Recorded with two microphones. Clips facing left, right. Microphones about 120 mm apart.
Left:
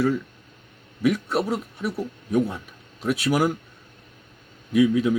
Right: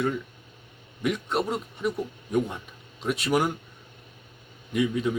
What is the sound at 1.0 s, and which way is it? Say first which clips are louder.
Speech: left 4 dB; 5° left (ahead or behind).